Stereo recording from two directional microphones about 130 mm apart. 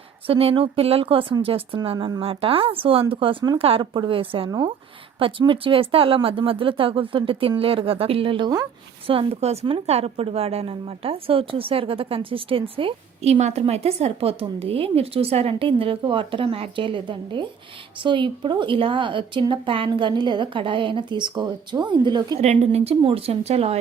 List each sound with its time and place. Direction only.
0.3 s a woman's voice: 45° right (ahead or behind)
4.4 s a woman's voice: 30° right (ahead or behind)
5.2 s a woman's voice: 40° right (ahead or behind)
13.4 s a woman's voice: 55° right (ahead or behind); by 22.4 s 35° right (ahead or behind)
22.6 s a woman's voice: 50° right (ahead or behind)